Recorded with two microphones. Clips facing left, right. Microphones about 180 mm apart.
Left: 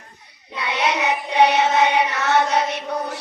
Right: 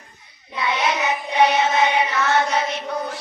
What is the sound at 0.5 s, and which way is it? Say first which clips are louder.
Child singing: even; 60° left (ahead or behind).